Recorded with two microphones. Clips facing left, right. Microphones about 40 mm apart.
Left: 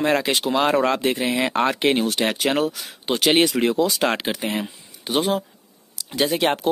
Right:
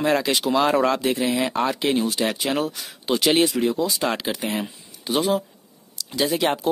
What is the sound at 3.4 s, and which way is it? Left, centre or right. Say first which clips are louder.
Speech: left 2 dB; left.